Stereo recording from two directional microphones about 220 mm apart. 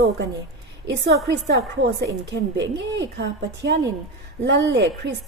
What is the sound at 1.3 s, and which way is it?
A woman's voice, 50° right (ahead or behind).